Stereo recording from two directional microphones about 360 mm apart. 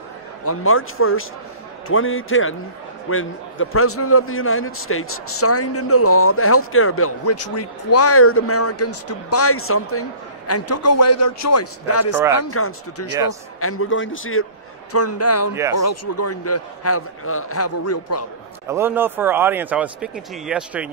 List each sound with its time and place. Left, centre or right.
0.5 s a man's voice: left
18.7 s speech: centre